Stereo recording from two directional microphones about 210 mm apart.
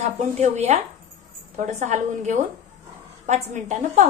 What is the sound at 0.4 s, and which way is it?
Speech, 35° right (ahead or behind).